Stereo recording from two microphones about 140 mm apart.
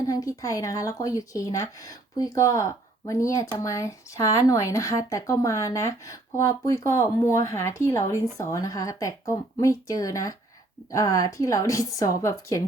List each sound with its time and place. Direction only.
0.0 s speech: 25° left (ahead or behind)